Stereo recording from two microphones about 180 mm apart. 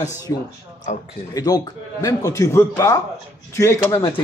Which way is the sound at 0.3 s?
15° left (ahead or behind).